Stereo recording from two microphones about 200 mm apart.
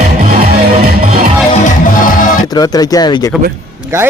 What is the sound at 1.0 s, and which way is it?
Music, 45° right (ahead or behind).